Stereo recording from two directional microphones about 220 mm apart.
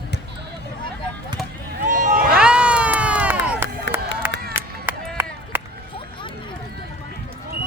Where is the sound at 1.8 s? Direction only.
35° right (ahead or behind).